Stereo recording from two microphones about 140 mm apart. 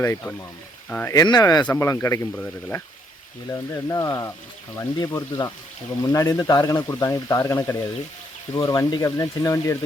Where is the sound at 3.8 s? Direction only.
25° left (ahead or behind).